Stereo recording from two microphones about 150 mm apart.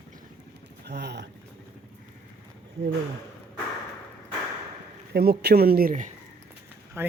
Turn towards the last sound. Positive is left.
turn(degrees=-15)  # may be behind; listen again after turning